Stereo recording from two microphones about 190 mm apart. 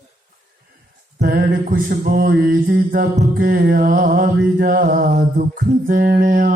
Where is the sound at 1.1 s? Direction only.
60° right (ahead or behind).